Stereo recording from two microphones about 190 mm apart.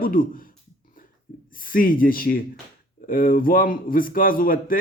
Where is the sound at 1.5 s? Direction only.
50° left (ahead or behind).